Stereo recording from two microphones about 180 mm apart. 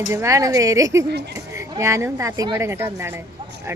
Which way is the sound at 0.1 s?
15° right (ahead or behind).